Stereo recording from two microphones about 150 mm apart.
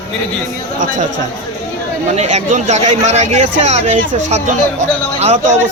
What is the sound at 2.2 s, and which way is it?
A man's voice, 50° right (ahead or behind).